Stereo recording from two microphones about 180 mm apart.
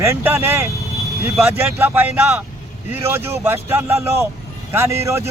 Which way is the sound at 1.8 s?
10° right (ahead or behind).